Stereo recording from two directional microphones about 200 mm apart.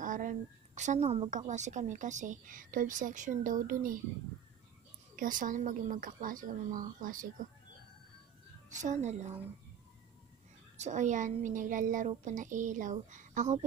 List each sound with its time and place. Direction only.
0.0 s a woman's voice: 40° right (ahead or behind)
5.1 s a woman's voice: 45° right (ahead or behind)
8.7 s a woman's voice: 35° right (ahead or behind)
10.8 s a woman's voice: 35° right (ahead or behind)